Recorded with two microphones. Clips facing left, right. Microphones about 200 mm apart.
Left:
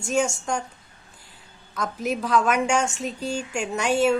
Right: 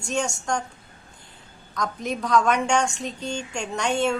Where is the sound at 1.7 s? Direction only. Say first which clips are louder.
Left 1 dB; 5° left (ahead or behind).